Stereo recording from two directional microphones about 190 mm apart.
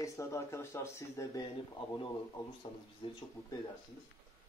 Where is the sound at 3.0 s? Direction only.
25° left (ahead or behind).